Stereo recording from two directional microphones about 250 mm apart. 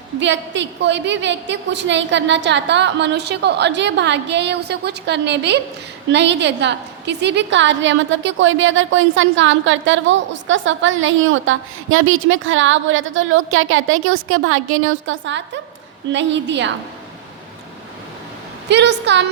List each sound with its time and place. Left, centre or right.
0.2 s a woman's voice: right
18.7 s a woman's voice: right